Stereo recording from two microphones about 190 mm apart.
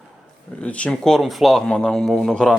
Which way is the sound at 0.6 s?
5° left (ahead or behind).